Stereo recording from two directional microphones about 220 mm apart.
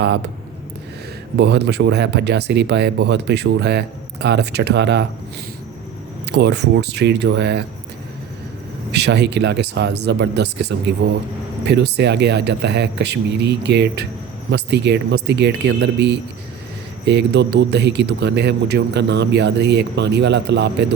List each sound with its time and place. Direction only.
0.0 s speech: 50° right (ahead or behind)
1.4 s speech: 50° right (ahead or behind)
6.3 s speech: 50° right (ahead or behind)
8.9 s speech: 50° right (ahead or behind)